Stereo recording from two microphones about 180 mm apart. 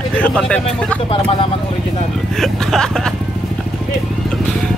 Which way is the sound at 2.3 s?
Centre (ahead or behind).